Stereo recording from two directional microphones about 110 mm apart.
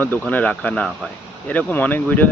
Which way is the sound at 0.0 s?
15° left (ahead or behind).